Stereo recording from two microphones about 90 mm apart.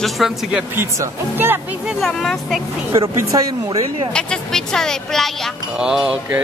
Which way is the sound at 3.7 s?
90° right.